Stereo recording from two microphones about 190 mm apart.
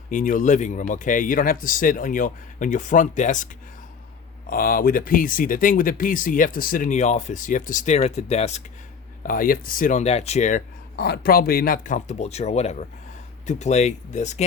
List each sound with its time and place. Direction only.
0.1 s speech: 45° left (ahead or behind)
9.2 s speech: 50° left (ahead or behind)